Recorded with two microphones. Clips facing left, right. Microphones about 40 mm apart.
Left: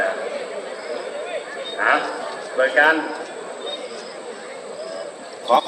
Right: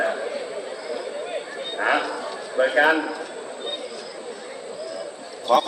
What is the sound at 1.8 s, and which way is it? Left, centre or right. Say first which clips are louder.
Speech: left 4 dB; left.